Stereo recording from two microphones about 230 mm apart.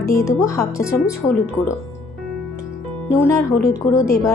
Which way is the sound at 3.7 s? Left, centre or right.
Centre.